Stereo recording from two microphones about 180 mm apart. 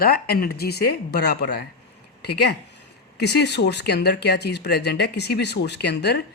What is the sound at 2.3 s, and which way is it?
Speech, 65° left (ahead or behind).